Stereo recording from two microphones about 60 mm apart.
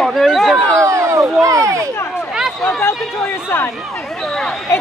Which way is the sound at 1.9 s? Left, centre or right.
Left.